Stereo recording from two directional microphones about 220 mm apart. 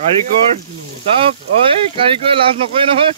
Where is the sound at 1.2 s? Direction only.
25° right (ahead or behind).